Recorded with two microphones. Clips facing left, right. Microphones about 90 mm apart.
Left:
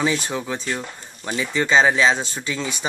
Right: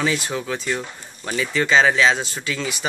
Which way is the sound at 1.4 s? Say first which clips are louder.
Even; 25° left (ahead or behind).